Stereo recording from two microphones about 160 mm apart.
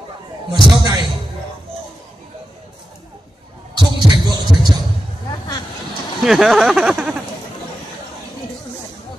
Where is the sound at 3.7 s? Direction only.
25° right (ahead or behind).